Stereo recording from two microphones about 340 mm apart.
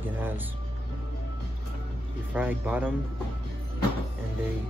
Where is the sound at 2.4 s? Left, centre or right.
Centre.